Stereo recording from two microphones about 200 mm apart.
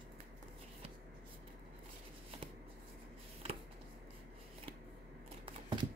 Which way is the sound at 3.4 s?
30° right (ahead or behind).